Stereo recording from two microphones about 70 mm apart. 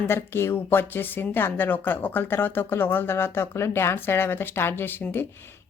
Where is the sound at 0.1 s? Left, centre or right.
Left.